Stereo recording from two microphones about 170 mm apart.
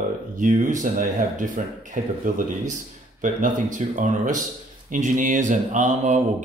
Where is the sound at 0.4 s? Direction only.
50° right (ahead or behind).